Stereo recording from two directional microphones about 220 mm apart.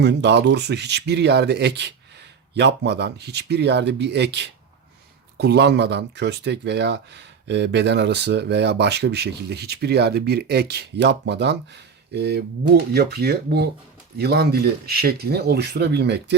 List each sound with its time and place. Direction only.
0.0 s speech: 50° right (ahead or behind)